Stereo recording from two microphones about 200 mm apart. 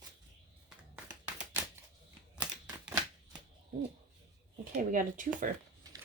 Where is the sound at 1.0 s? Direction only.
5° right (ahead or behind).